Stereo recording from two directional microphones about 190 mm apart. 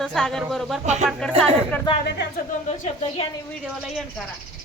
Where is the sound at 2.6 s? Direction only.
35° left (ahead or behind).